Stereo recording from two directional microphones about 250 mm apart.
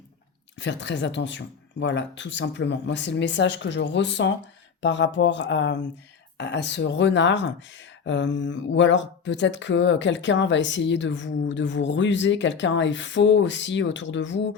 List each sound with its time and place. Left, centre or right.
0.6 s speech: left